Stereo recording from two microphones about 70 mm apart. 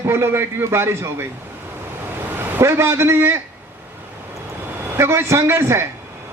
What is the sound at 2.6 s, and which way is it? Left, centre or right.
Speech, right.